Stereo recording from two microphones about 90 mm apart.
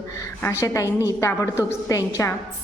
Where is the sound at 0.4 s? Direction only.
35° left (ahead or behind).